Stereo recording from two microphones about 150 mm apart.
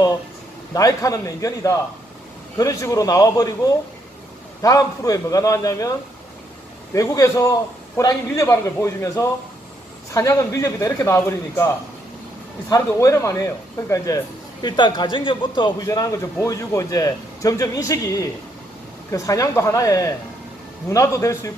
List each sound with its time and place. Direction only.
0.7 s speech: 25° left (ahead or behind)